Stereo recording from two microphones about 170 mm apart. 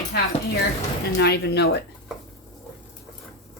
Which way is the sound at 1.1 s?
70° left (ahead or behind).